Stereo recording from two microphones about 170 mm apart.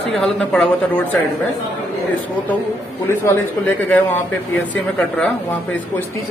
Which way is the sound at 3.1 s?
10° left (ahead or behind).